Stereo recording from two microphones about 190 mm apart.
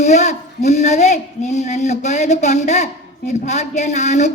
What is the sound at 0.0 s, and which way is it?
Speech, 40° left (ahead or behind).